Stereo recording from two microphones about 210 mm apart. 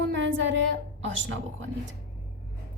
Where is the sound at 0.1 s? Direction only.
65° right (ahead or behind).